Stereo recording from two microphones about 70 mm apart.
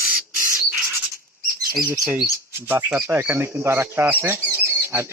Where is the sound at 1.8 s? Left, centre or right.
Right.